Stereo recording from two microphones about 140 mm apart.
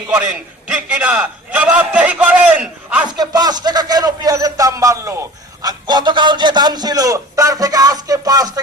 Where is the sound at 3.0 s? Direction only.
30° right (ahead or behind).